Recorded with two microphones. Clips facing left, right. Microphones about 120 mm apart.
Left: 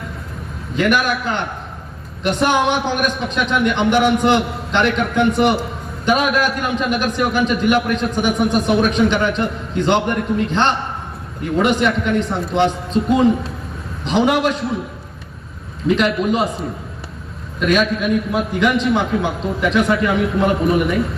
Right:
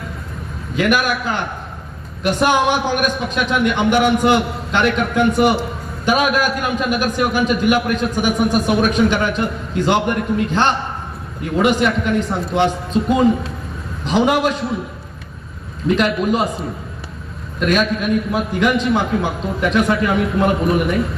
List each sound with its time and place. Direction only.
0.8 s a man's voice: 5° right (ahead or behind)
15.9 s a man's voice: centre (ahead or behind)